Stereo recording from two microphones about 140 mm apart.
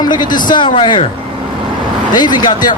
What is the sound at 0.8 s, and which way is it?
Speech, 35° left (ahead or behind).